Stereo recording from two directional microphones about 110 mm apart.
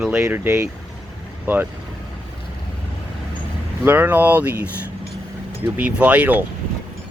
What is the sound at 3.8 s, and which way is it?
Speech, 20° right (ahead or behind).